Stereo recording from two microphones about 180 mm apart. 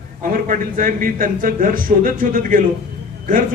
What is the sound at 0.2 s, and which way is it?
A man's voice, 50° right (ahead or behind).